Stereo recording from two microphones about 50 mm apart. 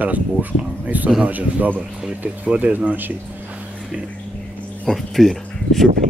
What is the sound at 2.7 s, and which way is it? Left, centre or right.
Speech, right.